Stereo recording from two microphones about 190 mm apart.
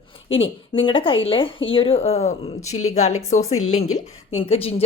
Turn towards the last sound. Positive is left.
turn(degrees=30)  # may be behind; listen again after turning